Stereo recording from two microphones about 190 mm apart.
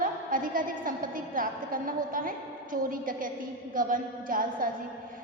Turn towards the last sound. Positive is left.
turn(degrees=-45)  # may be behind; listen again after turning